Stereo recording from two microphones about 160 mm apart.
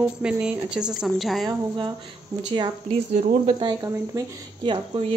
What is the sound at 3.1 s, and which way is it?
Speech, 45° right (ahead or behind).